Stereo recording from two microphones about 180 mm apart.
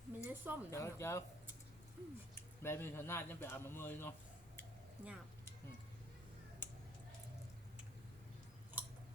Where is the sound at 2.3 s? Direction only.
15° left (ahead or behind).